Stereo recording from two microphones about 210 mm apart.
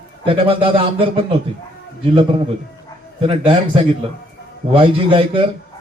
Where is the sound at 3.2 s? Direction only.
25° right (ahead or behind).